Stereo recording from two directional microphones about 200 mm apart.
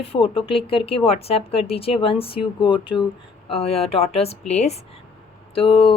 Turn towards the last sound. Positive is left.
turn(degrees=30)  # may be behind; listen again after turning